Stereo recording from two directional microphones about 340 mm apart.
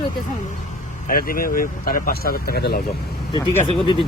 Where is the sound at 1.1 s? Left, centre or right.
Left.